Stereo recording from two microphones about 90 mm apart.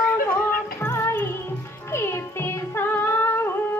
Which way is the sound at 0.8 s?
35° left (ahead or behind).